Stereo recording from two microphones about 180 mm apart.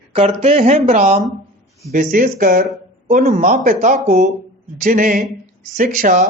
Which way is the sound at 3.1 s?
40° right (ahead or behind).